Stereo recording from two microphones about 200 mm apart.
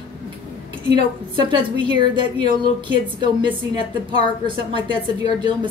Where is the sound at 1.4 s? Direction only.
25° right (ahead or behind).